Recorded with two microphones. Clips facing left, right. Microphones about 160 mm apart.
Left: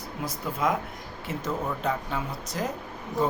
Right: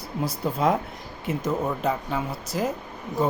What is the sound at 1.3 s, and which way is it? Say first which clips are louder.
Speech: right 6 dB; 15° right (ahead or behind).